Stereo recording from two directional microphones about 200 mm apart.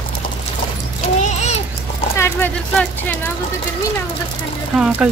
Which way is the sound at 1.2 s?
35° left (ahead or behind).